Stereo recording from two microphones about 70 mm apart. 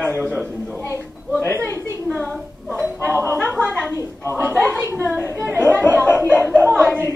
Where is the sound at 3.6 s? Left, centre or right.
Centre.